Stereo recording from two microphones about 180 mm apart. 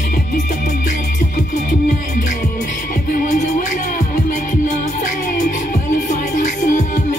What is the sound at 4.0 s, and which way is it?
Music, 45° left (ahead or behind).